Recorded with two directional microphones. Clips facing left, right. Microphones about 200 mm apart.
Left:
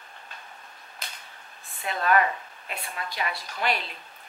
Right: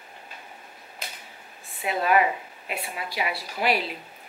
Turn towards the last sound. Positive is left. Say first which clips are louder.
# right 4 dB
turn(degrees=-5)  # may be behind; listen again after turning